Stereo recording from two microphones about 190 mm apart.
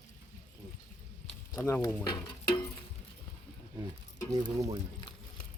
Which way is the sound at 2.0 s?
20° left (ahead or behind).